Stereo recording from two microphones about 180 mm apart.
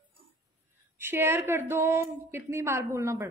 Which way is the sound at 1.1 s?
10° right (ahead or behind).